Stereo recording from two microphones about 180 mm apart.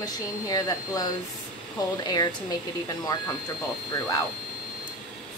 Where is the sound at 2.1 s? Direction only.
25° left (ahead or behind).